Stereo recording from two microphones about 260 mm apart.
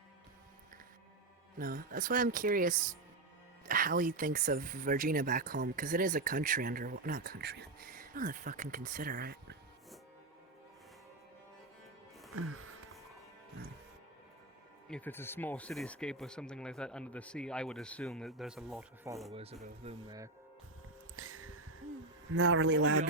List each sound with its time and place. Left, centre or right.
1.5 s speech: right
14.8 s speech: centre
19.3 s speech: right
21.2 s a sound: right
22.3 s speech: right